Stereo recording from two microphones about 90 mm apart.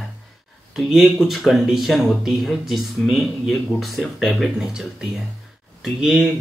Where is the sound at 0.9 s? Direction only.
Centre (ahead or behind).